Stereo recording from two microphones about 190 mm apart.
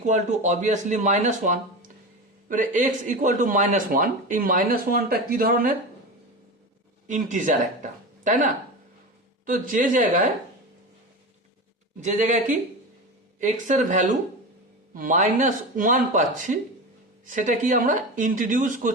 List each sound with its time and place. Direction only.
0.0 s speech: 40° right (ahead or behind)
7.1 s speech: 40° right (ahead or behind)
9.5 s speech: 45° right (ahead or behind)
12.0 s speech: 40° right (ahead or behind)